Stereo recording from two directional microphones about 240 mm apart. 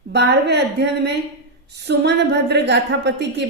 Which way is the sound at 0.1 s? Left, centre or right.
Right.